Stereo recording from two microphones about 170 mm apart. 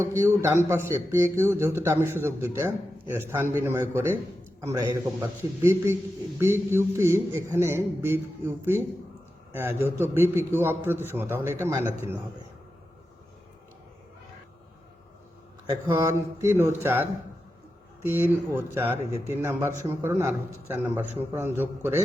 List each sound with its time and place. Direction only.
0.0 s a man's voice: 15° right (ahead or behind)
15.9 s a man's voice: 20° right (ahead or behind)